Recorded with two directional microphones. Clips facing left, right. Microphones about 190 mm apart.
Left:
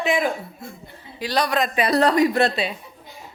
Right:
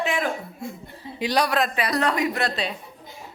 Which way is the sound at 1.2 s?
15° right (ahead or behind).